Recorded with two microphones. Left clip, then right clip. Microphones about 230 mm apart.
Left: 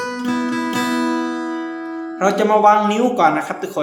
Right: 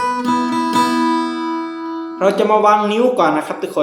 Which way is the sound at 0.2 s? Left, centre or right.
Right.